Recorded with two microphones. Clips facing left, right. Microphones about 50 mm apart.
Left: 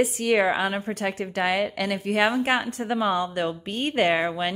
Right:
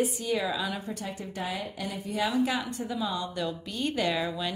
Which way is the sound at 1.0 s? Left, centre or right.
Left.